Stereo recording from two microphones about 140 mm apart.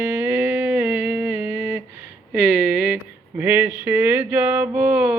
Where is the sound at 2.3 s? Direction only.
10° right (ahead or behind).